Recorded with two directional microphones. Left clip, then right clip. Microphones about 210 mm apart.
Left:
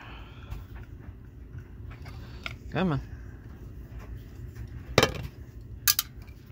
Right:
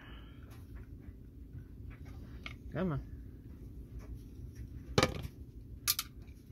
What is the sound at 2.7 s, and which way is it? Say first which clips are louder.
Speech: left 9 dB; 20° left (ahead or behind).